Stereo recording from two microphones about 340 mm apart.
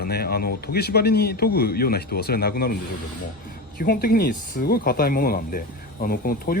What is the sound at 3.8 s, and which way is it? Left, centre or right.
Speech, left.